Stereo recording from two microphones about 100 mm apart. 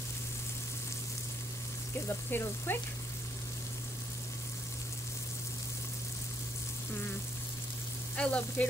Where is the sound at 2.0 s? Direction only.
25° left (ahead or behind).